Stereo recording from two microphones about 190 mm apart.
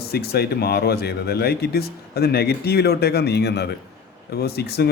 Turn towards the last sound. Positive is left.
turn(degrees=60)  # may be behind; listen again after turning